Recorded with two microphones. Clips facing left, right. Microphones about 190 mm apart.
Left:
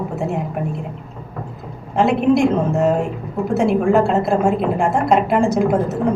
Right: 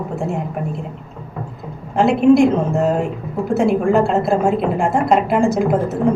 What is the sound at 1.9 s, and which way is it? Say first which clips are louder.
A woman's voice: right 3 dB; centre (ahead or behind).